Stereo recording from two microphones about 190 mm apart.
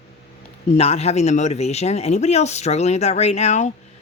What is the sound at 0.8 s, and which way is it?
Speech, 35° left (ahead or behind).